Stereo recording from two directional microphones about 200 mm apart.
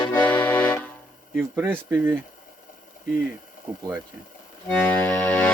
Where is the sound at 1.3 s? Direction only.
10° right (ahead or behind).